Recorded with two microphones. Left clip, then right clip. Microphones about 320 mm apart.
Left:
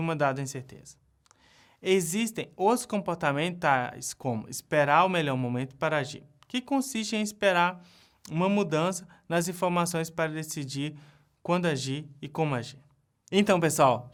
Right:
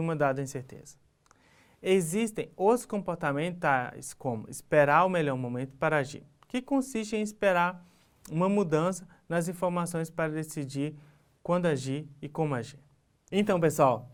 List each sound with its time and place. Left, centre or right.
0.1 s speech: left
1.8 s speech: left
2.9 s speech: left
8.3 s speech: left
8.5 s speech: left
9.3 s speech: left
12.5 s speech: left
13.3 s speech: left